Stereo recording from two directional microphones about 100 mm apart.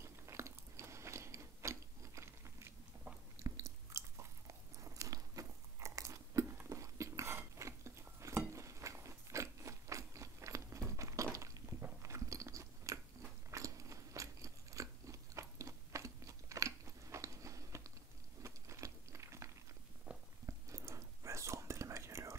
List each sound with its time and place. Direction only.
0.0 s biting: 30° right (ahead or behind)
3.4 s chewing: 30° right (ahead or behind)
4.7 s biting: 35° right (ahead or behind)
6.6 s a sound: 30° right (ahead or behind)
11.8 s biting: 30° right (ahead or behind)
20.1 s a sound: 10° right (ahead or behind)
20.4 s whispering: 30° right (ahead or behind)